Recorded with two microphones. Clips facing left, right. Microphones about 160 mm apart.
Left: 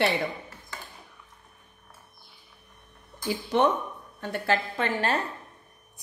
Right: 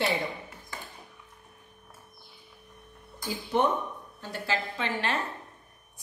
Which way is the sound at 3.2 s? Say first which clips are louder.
Left 3 dB; 80° left.